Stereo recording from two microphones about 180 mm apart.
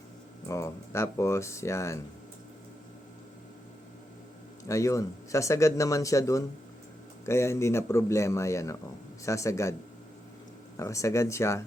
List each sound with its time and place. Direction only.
0.4 s speech: 15° left (ahead or behind)
4.7 s speech: 15° left (ahead or behind)
10.8 s speech: 15° left (ahead or behind)